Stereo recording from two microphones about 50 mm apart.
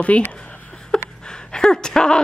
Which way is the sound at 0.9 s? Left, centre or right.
Centre.